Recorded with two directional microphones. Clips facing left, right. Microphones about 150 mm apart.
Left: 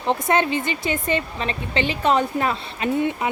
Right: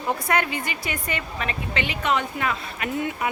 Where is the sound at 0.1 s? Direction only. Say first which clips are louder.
Left 4 dB; 25° left (ahead or behind).